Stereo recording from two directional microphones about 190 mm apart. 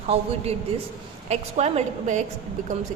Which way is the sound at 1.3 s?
35° right (ahead or behind).